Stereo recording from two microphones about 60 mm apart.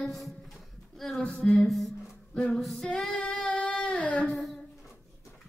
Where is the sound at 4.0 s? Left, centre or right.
Left.